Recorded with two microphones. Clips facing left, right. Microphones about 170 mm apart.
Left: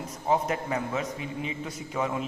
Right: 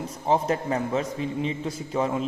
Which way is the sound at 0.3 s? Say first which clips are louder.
Right 3 dB; 30° right (ahead or behind).